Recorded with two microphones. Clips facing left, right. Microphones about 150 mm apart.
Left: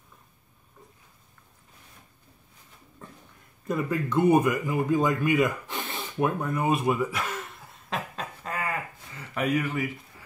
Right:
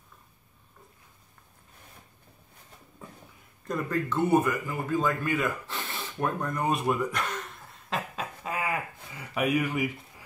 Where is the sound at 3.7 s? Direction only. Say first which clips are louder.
Left 3 dB; 10° left (ahead or behind).